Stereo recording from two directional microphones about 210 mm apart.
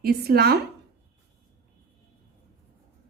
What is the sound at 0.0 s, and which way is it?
Speech, 50° right (ahead or behind).